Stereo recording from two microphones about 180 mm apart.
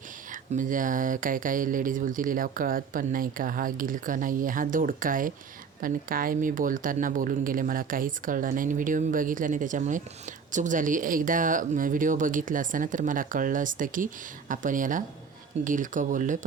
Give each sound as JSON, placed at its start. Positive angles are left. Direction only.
{"t": 0.3, "sound": "speech", "side_deg": -45}